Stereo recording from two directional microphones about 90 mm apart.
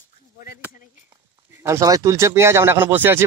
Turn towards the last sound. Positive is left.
turn(degrees=-20)  # may be behind; listen again after turning